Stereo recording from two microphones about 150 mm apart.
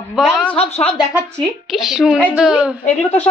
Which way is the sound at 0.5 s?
40° left (ahead or behind).